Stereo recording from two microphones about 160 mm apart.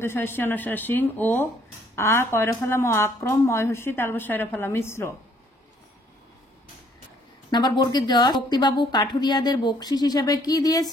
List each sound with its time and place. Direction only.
0.0 s speech: 15° left (ahead or behind)
7.5 s a woman's voice: 25° left (ahead or behind)